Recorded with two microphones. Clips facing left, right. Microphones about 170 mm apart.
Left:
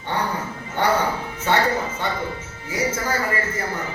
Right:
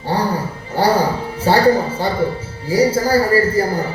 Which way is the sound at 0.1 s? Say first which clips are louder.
Right 6 dB; 35° right (ahead or behind).